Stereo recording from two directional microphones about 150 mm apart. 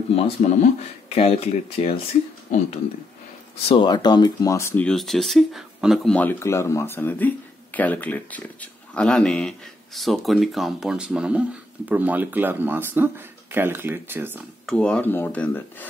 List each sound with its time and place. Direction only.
0.1 s speech: 45° left (ahead or behind)
3.6 s speech: 30° left (ahead or behind)
4.8 s speech: centre (ahead or behind)
6.1 s speech: 15° left (ahead or behind); by 14.4 s 15° right (ahead or behind)
14.7 s speech: 5° left (ahead or behind)